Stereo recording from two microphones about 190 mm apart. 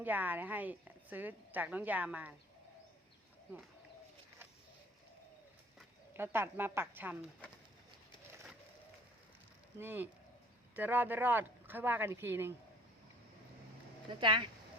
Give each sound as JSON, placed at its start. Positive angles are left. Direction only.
{"t": 0.0, "sound": "speech", "side_deg": -10}
{"t": 6.1, "sound": "speech", "side_deg": -10}
{"t": 9.7, "sound": "speech", "side_deg": -10}
{"t": 14.1, "sound": "speech", "side_deg": -25}